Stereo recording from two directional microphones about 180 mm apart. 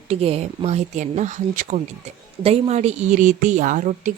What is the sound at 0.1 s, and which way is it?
A woman's voice, 35° right (ahead or behind).